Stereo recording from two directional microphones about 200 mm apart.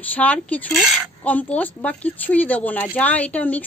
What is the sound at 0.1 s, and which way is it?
Speech, 5° left (ahead or behind).